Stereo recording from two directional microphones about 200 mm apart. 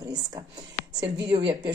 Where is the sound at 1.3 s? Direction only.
25° right (ahead or behind).